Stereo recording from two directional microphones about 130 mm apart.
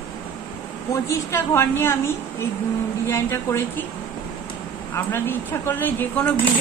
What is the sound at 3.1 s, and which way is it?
Speech, 20° left (ahead or behind).